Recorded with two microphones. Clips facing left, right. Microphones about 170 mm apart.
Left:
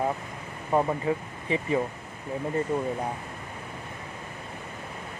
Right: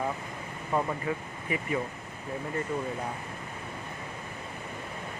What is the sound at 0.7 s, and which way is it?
Speech, 30° left (ahead or behind).